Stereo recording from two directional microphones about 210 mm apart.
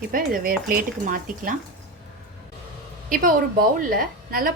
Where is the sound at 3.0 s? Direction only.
40° right (ahead or behind).